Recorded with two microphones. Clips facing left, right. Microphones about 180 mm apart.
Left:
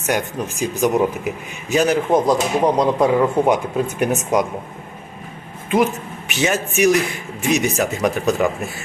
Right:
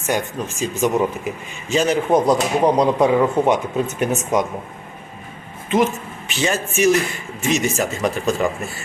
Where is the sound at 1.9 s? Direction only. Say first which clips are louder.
Right 2 dB; 5° left (ahead or behind).